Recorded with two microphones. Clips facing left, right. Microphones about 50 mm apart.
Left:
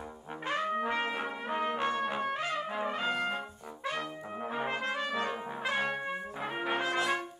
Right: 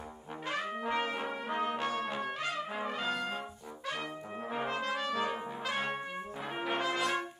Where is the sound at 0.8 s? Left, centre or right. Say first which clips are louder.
Left 1 dB; centre.